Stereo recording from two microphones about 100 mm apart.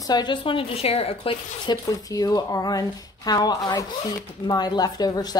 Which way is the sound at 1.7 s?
40° left (ahead or behind).